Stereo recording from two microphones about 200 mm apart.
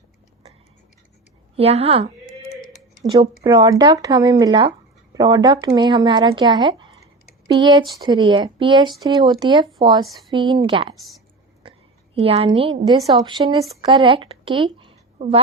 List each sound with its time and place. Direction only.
1.5 s speech: 30° right (ahead or behind)
3.1 s speech: 20° right (ahead or behind)
10.9 s a woman's voice: centre (ahead or behind)
12.1 s a woman's voice: 30° right (ahead or behind)